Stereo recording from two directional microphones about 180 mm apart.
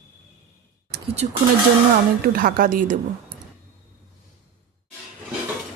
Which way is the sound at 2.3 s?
50° right (ahead or behind).